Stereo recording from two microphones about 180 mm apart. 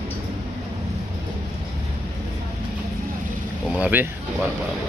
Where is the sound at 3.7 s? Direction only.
10° right (ahead or behind).